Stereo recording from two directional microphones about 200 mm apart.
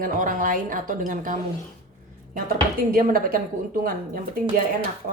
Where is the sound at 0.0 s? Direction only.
40° right (ahead or behind).